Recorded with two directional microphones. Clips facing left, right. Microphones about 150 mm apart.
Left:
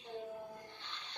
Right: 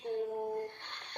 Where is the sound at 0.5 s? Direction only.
60° right (ahead or behind).